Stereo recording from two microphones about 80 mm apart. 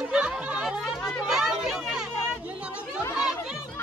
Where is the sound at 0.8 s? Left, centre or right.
Centre.